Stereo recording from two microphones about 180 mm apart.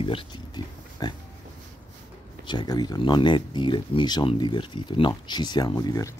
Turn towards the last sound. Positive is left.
turn(degrees=20)  # may be behind; listen again after turning